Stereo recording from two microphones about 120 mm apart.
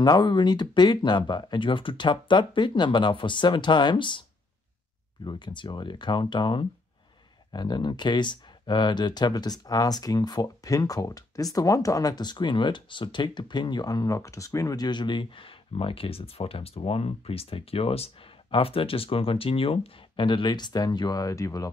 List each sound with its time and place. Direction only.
0.0 s speech: 40° left (ahead or behind)
5.2 s speech: 40° left (ahead or behind)